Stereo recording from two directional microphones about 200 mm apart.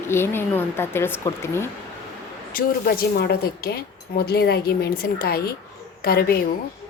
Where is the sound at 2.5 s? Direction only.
50° left (ahead or behind).